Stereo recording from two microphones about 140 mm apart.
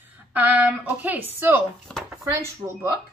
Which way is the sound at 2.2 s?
20° right (ahead or behind).